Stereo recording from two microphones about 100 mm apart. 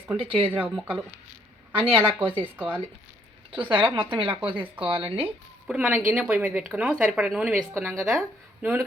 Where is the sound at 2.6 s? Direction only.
15° right (ahead or behind).